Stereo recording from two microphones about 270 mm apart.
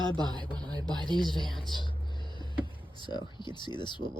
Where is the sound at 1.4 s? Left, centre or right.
Centre.